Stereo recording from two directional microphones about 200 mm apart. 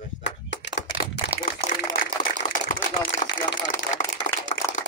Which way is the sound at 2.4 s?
45° left (ahead or behind).